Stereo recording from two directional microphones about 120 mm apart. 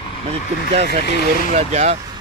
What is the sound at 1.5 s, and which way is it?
Speech, 70° right (ahead or behind).